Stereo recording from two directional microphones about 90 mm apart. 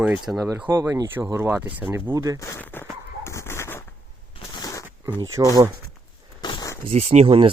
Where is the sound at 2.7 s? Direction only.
20° left (ahead or behind).